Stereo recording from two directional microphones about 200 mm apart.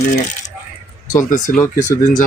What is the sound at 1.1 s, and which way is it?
Speech, 40° left (ahead or behind).